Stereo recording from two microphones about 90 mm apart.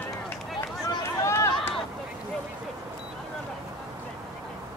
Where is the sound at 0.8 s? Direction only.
30° left (ahead or behind).